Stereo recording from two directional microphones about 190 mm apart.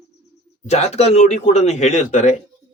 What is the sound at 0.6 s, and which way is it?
Speech, 35° left (ahead or behind).